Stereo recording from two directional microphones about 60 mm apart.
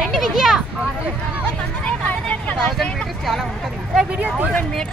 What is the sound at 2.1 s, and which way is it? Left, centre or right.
Vehicle, left.